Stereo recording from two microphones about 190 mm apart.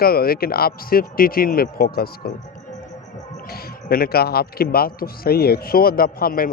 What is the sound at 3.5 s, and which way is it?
A man's voice, 55° left (ahead or behind).